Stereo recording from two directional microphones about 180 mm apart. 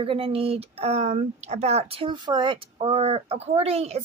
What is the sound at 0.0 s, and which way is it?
Speech, 30° right (ahead or behind).